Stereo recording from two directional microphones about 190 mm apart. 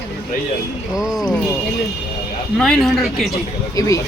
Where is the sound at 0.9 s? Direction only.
Centre (ahead or behind).